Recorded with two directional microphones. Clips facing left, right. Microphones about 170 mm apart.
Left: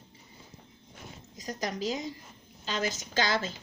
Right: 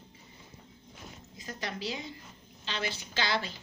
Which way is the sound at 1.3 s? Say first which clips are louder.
Left 5 dB; 40° left (ahead or behind).